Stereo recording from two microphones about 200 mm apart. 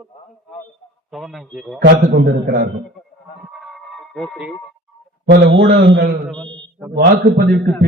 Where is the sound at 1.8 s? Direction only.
50° right (ahead or behind).